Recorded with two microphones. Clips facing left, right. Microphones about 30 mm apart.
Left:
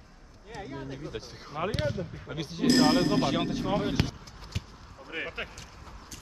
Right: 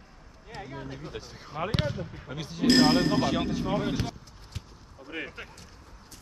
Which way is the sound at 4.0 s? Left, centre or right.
Left.